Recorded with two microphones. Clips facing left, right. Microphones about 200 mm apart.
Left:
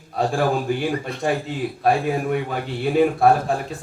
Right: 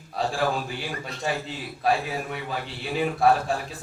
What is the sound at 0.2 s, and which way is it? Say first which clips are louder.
A man's voice: left 5 dB; 50° left (ahead or behind).